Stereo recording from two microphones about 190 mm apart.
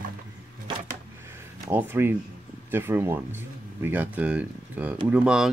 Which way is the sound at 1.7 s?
10° right (ahead or behind).